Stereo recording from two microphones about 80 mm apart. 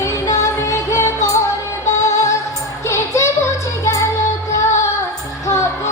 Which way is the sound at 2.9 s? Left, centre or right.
Left.